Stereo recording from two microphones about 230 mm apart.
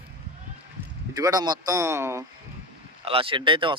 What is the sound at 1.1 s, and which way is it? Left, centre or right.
Speech, centre.